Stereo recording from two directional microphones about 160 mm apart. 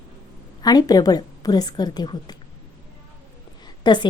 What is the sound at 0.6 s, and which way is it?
A woman's voice, 25° left (ahead or behind).